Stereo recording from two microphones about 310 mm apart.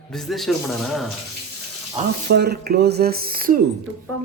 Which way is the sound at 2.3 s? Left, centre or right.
Right.